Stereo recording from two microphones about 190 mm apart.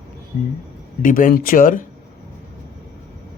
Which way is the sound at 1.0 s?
45° left (ahead or behind).